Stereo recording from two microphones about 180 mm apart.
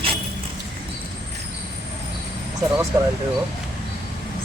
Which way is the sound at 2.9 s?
15° right (ahead or behind).